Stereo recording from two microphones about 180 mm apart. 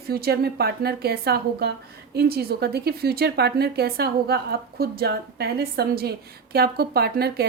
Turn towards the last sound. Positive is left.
turn(degrees=-60)  # may be behind; listen again after turning